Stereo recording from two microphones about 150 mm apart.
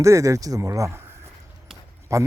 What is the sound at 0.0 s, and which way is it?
Speech, 20° right (ahead or behind).